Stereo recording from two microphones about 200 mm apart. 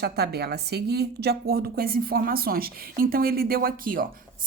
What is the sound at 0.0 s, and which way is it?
A woman's voice, 55° right (ahead or behind).